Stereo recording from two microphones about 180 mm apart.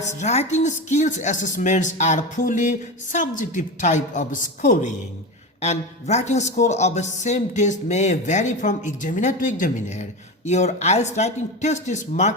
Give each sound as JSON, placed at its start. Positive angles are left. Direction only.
{"t": 0.0, "sound": "a woman's voice", "side_deg": 40}
{"t": 5.5, "sound": "speech", "side_deg": 35}